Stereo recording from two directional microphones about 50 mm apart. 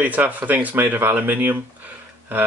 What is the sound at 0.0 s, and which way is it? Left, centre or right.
Speech, right.